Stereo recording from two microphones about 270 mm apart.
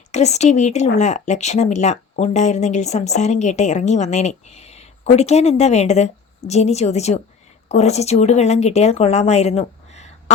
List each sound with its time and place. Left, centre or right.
0.1 s a woman's voice: left